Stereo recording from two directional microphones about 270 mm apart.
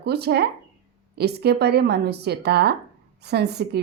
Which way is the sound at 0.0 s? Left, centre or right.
Right.